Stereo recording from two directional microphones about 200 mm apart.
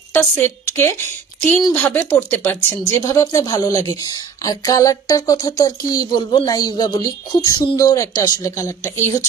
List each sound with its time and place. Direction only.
0.1 s a woman's voice: 10° left (ahead or behind)